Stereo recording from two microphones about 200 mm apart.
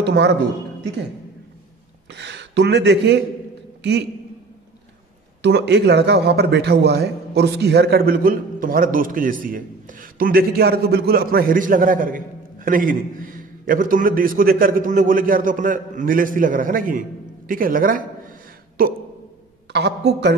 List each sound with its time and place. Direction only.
0.0 s speech: 60° right (ahead or behind)
2.1 s speech: 60° right (ahead or behind)
5.4 s a man's voice: 55° right (ahead or behind)